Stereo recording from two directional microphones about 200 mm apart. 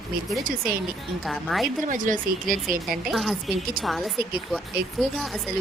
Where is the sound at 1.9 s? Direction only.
40° right (ahead or behind).